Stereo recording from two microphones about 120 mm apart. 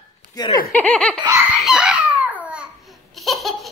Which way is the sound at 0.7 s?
10° left (ahead or behind).